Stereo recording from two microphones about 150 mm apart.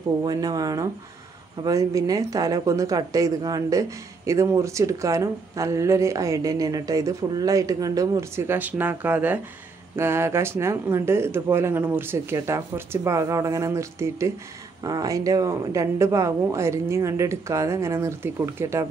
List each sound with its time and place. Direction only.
0.2 s speech: 25° right (ahead or behind)